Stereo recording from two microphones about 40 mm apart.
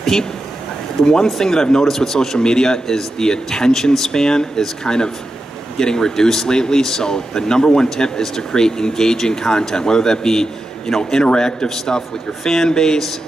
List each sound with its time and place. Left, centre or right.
0.0 s speech: centre